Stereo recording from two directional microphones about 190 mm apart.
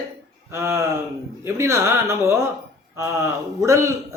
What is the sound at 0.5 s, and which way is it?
Speech, 15° right (ahead or behind).